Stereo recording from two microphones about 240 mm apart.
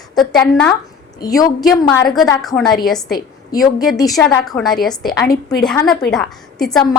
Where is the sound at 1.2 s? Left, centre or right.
Centre.